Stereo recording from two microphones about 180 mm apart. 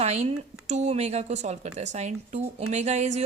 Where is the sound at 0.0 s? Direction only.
35° right (ahead or behind).